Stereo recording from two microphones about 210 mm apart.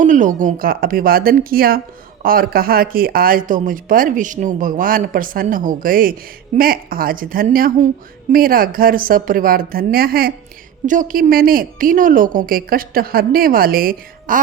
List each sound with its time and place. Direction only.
0.0 s a woman's voice: 35° right (ahead or behind)